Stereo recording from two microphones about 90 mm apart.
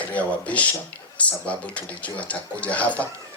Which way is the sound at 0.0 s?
15° left (ahead or behind).